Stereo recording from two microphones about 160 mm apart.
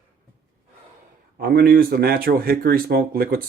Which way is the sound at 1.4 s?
75° right (ahead or behind).